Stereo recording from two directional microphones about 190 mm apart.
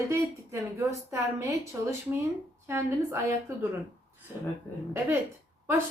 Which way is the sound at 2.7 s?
15° right (ahead or behind).